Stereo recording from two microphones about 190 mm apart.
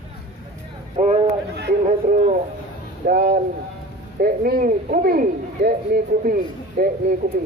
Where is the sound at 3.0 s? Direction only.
50° right (ahead or behind).